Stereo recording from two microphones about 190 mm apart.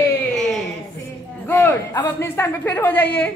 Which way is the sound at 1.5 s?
10° left (ahead or behind).